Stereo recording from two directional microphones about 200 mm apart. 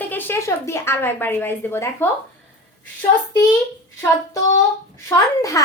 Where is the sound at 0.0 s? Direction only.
10° left (ahead or behind).